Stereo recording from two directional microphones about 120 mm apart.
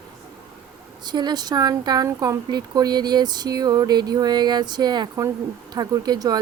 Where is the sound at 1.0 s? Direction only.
40° right (ahead or behind).